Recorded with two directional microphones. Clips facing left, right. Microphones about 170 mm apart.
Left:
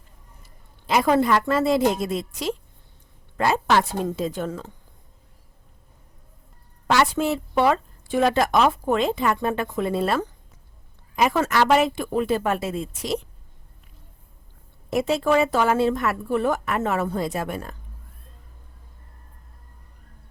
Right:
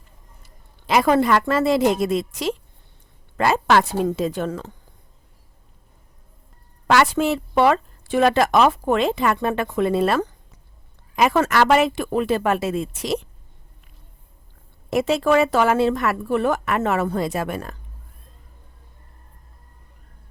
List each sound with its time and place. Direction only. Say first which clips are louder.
0.9 s a woman's voice: right 2 dB; 70° right (ahead or behind)
6.8 s a woman's voice: right 3 dB; 80° right
14.8 s speech: right 2 dB; 80° right